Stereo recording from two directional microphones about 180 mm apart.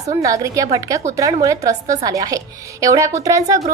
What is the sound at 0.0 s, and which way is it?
A woman's voice, 20° right (ahead or behind).